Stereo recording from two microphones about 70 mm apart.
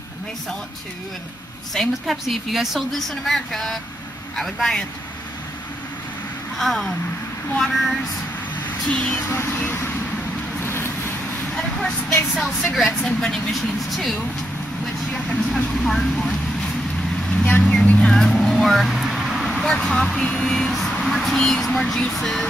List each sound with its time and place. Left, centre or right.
1.7 s a woman's voice: centre
6.6 s a woman's voice: centre
9.1 s speech: left
10.6 s vehicle: left
12.4 s a woman's voice: centre
15.2 s speech: centre
17.3 s vehicle: centre
18.1 s vehicle: centre
19.6 s a woman's voice: centre